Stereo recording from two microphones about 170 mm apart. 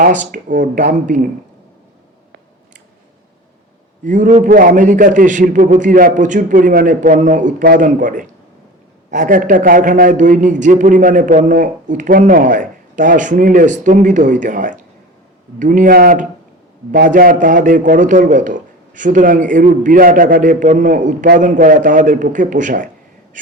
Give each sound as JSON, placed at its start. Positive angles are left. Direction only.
{"t": 0.0, "sound": "a man's voice", "side_deg": -50}
{"t": 4.0, "sound": "a man's voice", "side_deg": -50}